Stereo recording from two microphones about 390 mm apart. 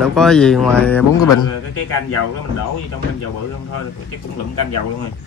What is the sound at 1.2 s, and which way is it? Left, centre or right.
Speech, left.